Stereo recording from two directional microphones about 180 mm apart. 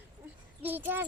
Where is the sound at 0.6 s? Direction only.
10° right (ahead or behind).